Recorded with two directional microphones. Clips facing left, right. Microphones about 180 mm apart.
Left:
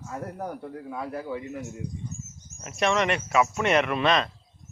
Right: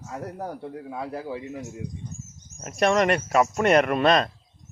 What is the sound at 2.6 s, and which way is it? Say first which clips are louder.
Speech: right 4 dB; 40° right (ahead or behind).